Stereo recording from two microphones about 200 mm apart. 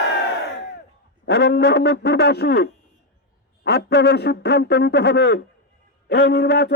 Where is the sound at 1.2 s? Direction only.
55° left (ahead or behind).